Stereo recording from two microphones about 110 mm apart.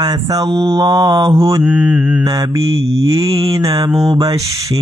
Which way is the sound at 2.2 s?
35° right (ahead or behind).